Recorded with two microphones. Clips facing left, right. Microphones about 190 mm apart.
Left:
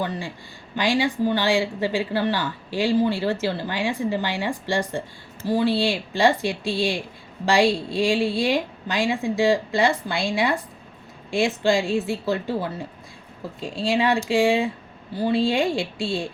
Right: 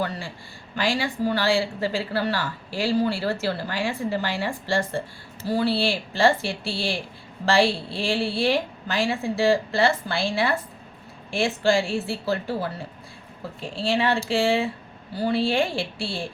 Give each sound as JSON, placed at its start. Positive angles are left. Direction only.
{"t": 0.8, "sound": "a woman's voice", "side_deg": 20}